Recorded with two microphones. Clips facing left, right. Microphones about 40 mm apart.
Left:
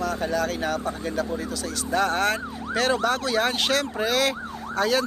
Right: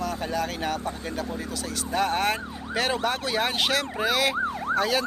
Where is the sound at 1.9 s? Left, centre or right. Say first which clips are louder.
Left 2 dB; centre.